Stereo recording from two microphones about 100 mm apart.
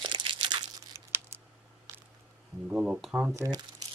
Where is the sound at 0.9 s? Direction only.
25° right (ahead or behind).